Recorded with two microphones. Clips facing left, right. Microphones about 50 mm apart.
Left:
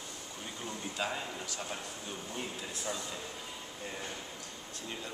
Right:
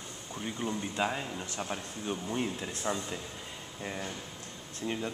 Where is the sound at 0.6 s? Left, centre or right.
Right.